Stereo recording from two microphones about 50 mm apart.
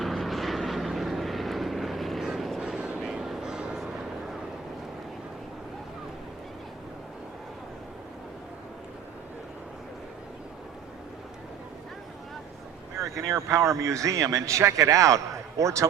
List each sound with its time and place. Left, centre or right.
0.0 s vehicle: centre
2.6 s vehicle: centre
13.1 s speech: right